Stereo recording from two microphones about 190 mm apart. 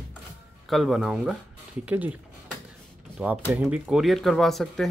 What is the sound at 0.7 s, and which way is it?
Speech, centre (ahead or behind).